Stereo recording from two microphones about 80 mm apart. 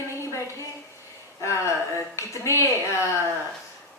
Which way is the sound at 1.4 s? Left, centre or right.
Left.